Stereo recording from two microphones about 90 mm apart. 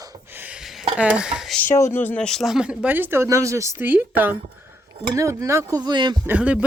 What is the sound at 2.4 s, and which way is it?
Speech, 10° right (ahead or behind).